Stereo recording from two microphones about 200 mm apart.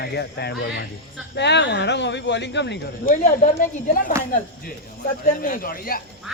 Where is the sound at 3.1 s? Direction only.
40° left (ahead or behind).